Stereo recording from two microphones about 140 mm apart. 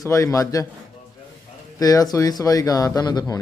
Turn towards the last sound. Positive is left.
turn(degrees=30)  # may be behind; listen again after turning